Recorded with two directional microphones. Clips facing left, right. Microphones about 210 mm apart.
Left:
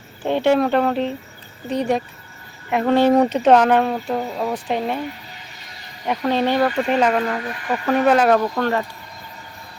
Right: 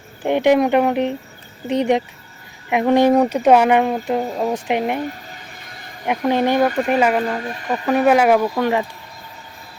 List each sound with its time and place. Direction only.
0.2 s speech: 15° right (ahead or behind)
5.6 s a sound: 50° right (ahead or behind)
6.1 s speech: 15° right (ahead or behind)
7.3 s speech: 25° right (ahead or behind)
7.9 s speech: 10° right (ahead or behind)